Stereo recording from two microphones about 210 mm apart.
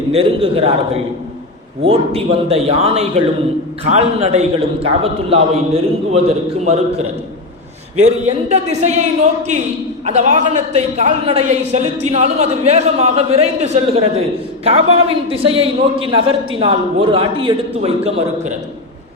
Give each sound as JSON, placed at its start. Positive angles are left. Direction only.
{"t": 0.1, "sound": "a man's voice", "side_deg": -25}
{"t": 1.9, "sound": "a man's voice", "side_deg": -30}